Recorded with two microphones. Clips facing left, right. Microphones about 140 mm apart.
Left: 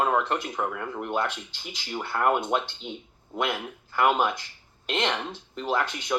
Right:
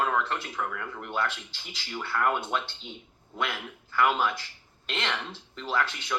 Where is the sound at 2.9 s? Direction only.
55° left (ahead or behind).